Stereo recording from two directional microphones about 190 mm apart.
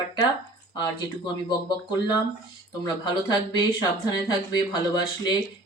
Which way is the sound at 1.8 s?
20° left (ahead or behind).